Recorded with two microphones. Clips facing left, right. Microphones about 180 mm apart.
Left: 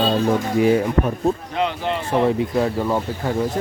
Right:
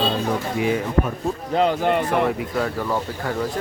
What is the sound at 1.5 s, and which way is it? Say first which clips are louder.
Speech: right 4 dB; 45° right (ahead or behind).